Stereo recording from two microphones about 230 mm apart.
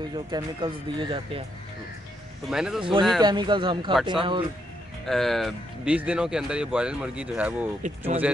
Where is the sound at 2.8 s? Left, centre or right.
Right.